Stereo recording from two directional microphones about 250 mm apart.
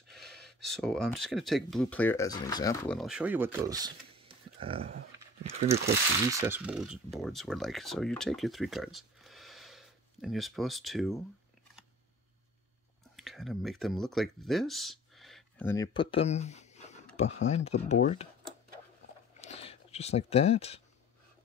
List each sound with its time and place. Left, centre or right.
0.1 s speech: centre; by 5.8 s right
6.4 s speech: centre
13.1 s speech: centre; by 18.3 s left
19.4 s a sound: left